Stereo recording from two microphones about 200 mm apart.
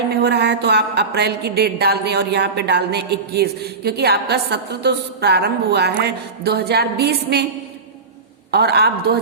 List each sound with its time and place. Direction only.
0.2 s a woman's voice: 55° right (ahead or behind)
8.4 s a woman's voice: 55° right (ahead or behind)